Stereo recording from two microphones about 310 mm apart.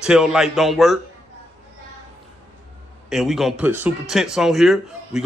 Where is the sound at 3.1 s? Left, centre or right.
Centre.